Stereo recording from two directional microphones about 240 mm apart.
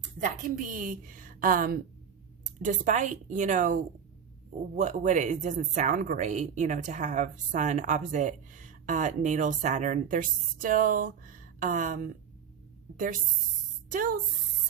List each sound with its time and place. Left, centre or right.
0.0 s speech: right
4.8 s speech: right
13.9 s speech: right